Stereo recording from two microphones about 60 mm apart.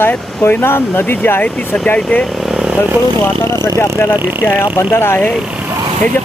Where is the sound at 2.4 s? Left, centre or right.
Centre.